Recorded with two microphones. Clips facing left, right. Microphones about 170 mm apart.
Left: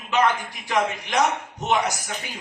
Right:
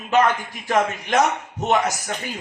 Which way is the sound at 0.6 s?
45° right (ahead or behind).